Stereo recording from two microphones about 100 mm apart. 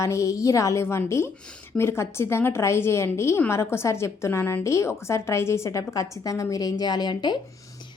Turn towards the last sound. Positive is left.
turn(degrees=45)  # may be behind; listen again after turning